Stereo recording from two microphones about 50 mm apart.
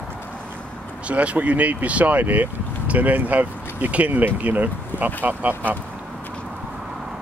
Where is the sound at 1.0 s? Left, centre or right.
Right.